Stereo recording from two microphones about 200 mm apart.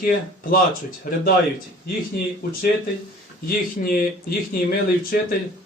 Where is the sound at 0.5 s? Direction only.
45° left (ahead or behind).